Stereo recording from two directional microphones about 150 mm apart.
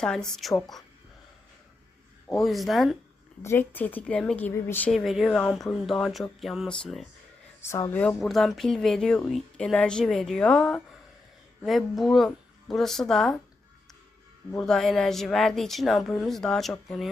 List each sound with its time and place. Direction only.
0.0 s speech: 5° left (ahead or behind)
2.3 s speech: centre (ahead or behind)
3.4 s a woman's voice: 15° left (ahead or behind)
4.9 s speech: centre (ahead or behind)
7.6 s a woman's voice: 20° left (ahead or behind)
8.0 s speech: centre (ahead or behind)
14.6 s speech: centre (ahead or behind)